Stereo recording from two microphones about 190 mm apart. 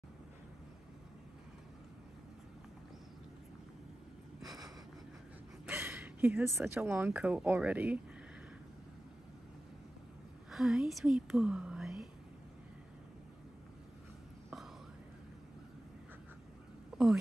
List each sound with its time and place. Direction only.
5.7 s speech: 10° right (ahead or behind)
10.5 s speech: 5° right (ahead or behind)
16.9 s a sound: centre (ahead or behind)